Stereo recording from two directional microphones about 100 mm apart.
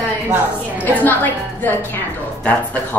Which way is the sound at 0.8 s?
15° left (ahead or behind).